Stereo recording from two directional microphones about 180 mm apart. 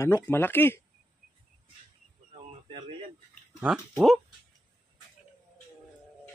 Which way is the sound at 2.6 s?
30° right (ahead or behind).